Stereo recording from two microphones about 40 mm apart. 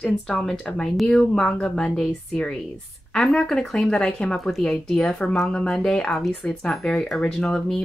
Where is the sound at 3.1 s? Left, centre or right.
Centre.